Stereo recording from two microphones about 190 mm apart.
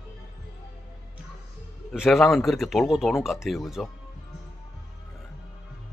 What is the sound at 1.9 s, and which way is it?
Speech, centre (ahead or behind).